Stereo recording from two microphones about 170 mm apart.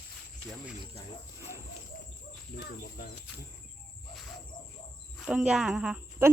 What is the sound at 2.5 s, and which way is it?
Speech, 70° left (ahead or behind).